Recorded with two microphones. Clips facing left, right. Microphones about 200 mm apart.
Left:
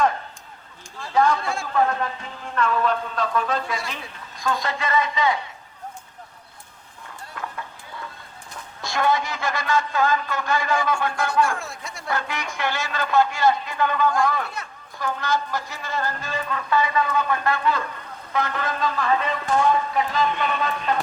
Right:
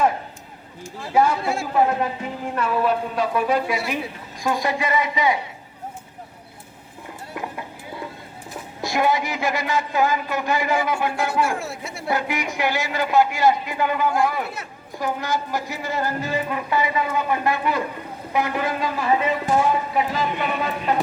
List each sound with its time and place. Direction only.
1.0 s a man's voice: 10° right (ahead or behind)
7.3 s music: 15° right (ahead or behind)
8.8 s a man's voice: 15° right (ahead or behind)